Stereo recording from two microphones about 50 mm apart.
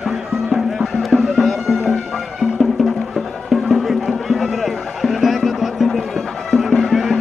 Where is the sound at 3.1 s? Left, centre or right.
Centre.